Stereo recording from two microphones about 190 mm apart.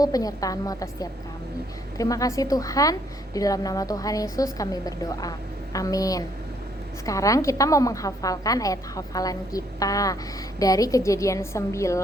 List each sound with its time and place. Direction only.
0.0 s a woman's voice: 20° left (ahead or behind)